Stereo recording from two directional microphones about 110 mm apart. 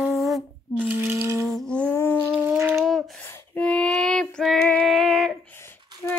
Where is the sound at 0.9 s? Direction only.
15° right (ahead or behind).